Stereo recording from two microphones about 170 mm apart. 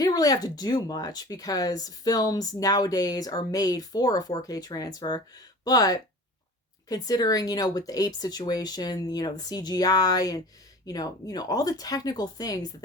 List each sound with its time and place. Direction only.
0.0 s speech: 20° left (ahead or behind)